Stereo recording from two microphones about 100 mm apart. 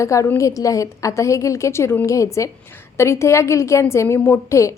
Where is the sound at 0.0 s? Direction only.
30° left (ahead or behind).